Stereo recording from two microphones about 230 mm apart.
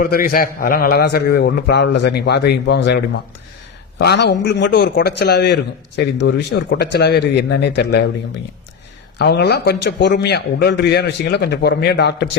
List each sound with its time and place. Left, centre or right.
0.0 s a man's voice: left
9.1 s a man's voice: left